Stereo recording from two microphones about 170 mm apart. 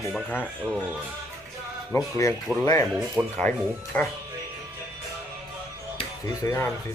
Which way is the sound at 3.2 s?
15° right (ahead or behind).